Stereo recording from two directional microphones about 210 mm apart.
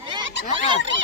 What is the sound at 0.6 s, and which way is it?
Speech, 60° right (ahead or behind).